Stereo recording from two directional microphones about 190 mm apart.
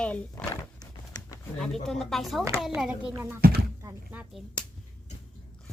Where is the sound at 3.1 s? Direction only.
15° right (ahead or behind).